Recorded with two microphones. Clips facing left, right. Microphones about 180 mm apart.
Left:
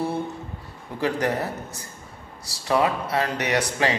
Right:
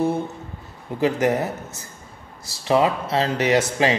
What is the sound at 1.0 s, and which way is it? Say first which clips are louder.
Speech: right 4 dB; 20° right (ahead or behind).